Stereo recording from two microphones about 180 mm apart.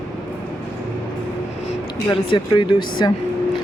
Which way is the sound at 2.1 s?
25° left (ahead or behind).